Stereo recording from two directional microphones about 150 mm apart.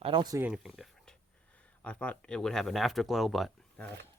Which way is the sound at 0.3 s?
10° right (ahead or behind).